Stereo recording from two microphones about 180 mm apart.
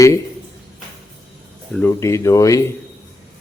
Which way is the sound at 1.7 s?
10° left (ahead or behind).